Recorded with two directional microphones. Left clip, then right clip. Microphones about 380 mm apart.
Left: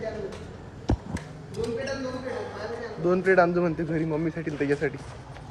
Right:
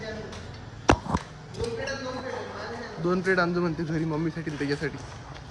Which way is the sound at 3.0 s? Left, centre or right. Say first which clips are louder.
Left 4 dB; centre.